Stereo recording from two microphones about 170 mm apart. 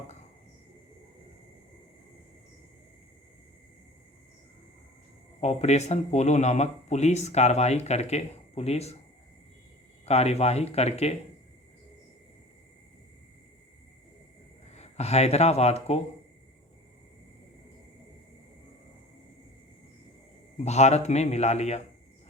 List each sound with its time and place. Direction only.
5.4 s speech: 40° left (ahead or behind)
10.1 s speech: 40° left (ahead or behind)
14.7 s speech: 40° left (ahead or behind)
20.6 s speech: 40° left (ahead or behind)